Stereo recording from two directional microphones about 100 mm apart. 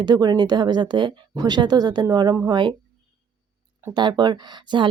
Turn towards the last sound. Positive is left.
turn(degrees=-50)  # may be behind; listen again after turning